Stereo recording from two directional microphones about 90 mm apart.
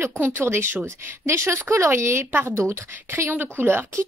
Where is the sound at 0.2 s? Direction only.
25° right (ahead or behind).